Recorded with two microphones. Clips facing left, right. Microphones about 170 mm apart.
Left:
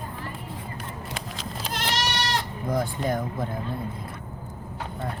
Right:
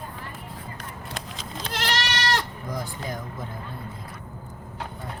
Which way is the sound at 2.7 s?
55° left (ahead or behind).